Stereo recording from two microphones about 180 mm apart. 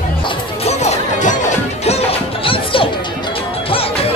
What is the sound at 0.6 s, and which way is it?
Music, 40° left (ahead or behind).